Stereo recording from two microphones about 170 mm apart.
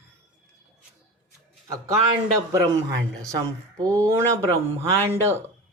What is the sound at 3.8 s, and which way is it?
Speech, 20° right (ahead or behind).